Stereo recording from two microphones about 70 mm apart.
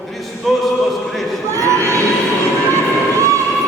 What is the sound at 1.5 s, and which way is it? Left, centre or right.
Crowd, right.